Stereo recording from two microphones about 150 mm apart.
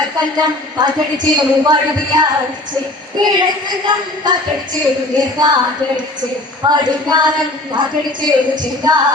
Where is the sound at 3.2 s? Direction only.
30° right (ahead or behind).